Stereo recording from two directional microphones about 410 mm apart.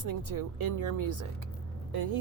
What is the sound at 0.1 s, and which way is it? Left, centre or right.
Speech, right.